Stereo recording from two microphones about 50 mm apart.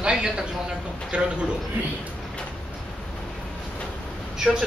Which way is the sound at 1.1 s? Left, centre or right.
Right.